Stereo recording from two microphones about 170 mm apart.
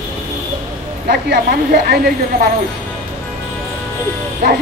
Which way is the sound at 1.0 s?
70° right (ahead or behind).